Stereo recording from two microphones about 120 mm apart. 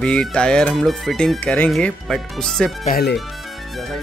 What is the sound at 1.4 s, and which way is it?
Speech, 10° left (ahead or behind).